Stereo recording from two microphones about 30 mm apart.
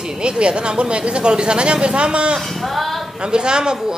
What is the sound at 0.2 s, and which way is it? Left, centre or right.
Speech, right.